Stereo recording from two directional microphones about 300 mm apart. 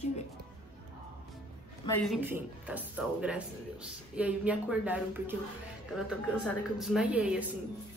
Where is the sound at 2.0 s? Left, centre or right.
Centre.